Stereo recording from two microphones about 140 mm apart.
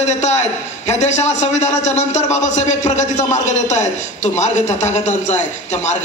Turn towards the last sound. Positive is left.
turn(degrees=55)  # may be behind; listen again after turning